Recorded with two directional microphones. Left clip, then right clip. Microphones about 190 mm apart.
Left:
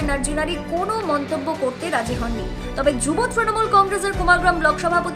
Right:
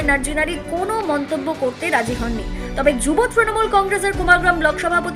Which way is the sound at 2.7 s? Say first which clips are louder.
Right 3 dB; 10° right (ahead or behind).